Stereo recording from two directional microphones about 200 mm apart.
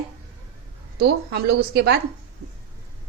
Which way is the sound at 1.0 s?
55° right (ahead or behind).